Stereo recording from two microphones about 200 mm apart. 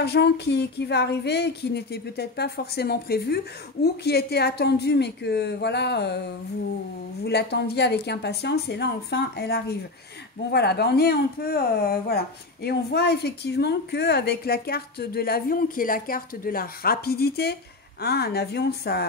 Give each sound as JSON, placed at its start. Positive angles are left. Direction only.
{"t": 0.0, "sound": "speech", "side_deg": 55}